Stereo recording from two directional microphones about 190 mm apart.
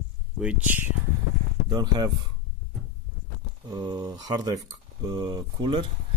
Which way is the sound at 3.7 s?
20° right (ahead or behind).